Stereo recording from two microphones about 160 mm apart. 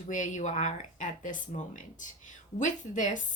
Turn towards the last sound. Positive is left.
turn(degrees=50)  # may be behind; listen again after turning